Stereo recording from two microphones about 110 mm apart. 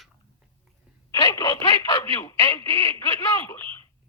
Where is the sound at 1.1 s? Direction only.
30° left (ahead or behind).